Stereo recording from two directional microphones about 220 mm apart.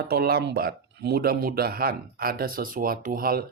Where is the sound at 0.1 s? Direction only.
45° right (ahead or behind).